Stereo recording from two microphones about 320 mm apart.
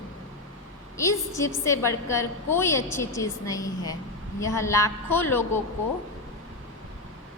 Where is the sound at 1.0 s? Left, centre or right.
Centre.